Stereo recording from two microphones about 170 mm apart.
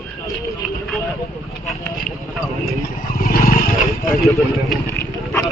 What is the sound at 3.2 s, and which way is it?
Wild animals, 55° left (ahead or behind).